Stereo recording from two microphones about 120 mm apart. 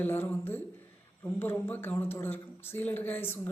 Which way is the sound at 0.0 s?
15° left (ahead or behind).